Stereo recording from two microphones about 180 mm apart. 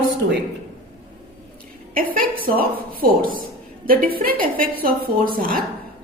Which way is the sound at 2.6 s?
55° right (ahead or behind).